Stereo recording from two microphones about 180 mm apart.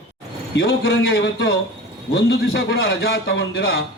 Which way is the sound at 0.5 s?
65° left (ahead or behind).